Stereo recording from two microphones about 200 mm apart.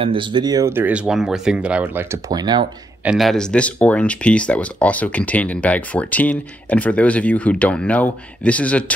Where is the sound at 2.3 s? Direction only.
20° right (ahead or behind).